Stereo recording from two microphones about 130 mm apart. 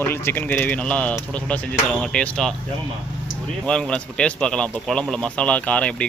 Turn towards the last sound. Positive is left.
turn(degrees=10)  # may be behind; listen again after turning